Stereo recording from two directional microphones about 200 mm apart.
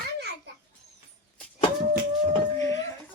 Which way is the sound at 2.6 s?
15° left (ahead or behind).